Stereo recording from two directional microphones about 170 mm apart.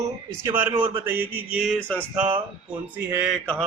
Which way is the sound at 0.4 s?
10° right (ahead or behind).